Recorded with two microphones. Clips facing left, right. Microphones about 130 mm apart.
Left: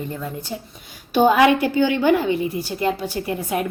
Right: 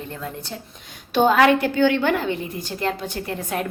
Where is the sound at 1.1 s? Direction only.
10° left (ahead or behind).